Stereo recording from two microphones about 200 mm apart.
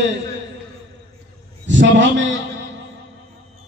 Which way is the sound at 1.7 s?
65° right (ahead or behind).